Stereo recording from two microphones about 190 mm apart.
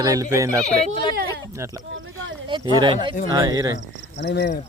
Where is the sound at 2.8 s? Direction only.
25° right (ahead or behind).